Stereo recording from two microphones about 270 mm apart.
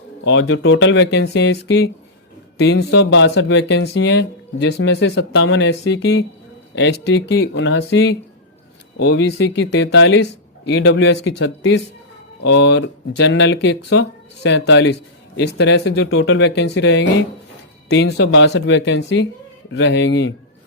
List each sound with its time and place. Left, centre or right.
0.3 s speech: left